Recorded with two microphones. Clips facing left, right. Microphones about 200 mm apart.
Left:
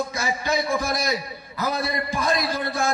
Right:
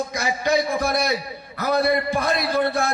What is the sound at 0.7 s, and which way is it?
Speech, 60° right (ahead or behind).